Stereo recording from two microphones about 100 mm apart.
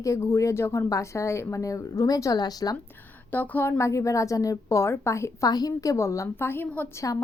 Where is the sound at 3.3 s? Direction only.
20° left (ahead or behind).